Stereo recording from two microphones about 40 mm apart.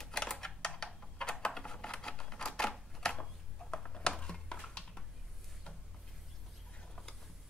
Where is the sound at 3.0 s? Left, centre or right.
Centre.